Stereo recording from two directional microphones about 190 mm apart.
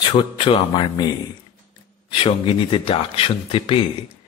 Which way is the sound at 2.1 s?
30° left (ahead or behind).